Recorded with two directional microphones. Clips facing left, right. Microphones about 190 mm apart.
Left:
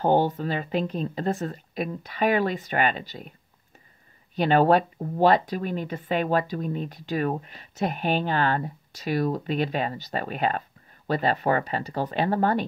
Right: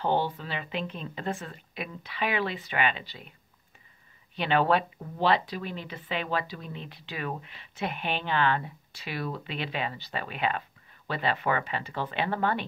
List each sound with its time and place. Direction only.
0.0 s speech: 45° left (ahead or behind)
4.4 s speech: 40° left (ahead or behind)